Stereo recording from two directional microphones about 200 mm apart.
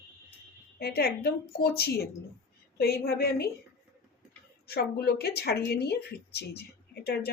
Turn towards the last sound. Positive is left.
turn(degrees=55)  # may be behind; listen again after turning